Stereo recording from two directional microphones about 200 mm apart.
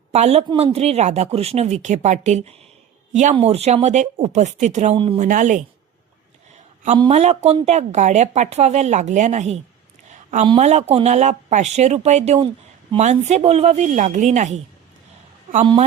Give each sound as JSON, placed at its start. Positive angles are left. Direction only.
{"t": 0.1, "sound": "speech", "side_deg": -30}
{"t": 5.2, "sound": "speech", "side_deg": -40}
{"t": 6.9, "sound": "speech", "side_deg": -20}
{"t": 7.2, "sound": "speech", "side_deg": -30}
{"t": 15.6, "sound": "speech", "side_deg": -25}